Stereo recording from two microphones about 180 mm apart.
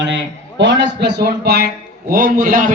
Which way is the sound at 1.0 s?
65° right (ahead or behind).